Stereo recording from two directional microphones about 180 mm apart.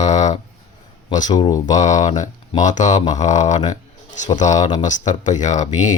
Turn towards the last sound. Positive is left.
turn(degrees=40)  # may be behind; listen again after turning